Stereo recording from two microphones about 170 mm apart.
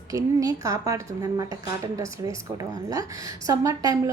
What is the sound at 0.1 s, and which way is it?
A woman's voice, 20° right (ahead or behind).